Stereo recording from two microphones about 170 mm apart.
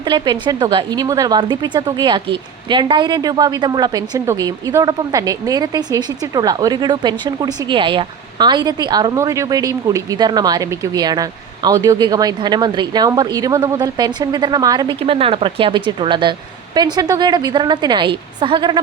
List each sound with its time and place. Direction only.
0.0 s a woman's voice: 25° right (ahead or behind)